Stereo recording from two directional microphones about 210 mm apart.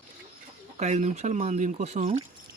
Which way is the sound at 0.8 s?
35° right (ahead or behind).